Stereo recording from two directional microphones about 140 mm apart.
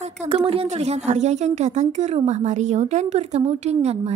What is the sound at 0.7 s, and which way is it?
A woman's voice, 50° right (ahead or behind).